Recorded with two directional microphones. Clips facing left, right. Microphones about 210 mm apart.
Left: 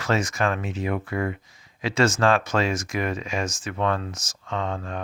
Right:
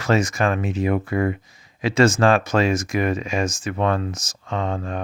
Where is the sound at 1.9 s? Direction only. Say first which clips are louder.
Right 4 dB; 15° right (ahead or behind).